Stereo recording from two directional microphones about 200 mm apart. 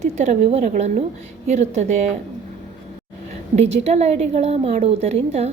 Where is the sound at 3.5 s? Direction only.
35° right (ahead or behind).